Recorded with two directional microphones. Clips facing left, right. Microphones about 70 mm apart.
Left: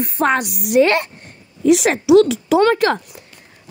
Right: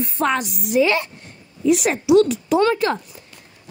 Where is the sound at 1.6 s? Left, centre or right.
Left.